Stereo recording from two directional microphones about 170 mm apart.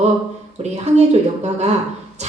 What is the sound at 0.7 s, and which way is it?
Speech, 40° right (ahead or behind).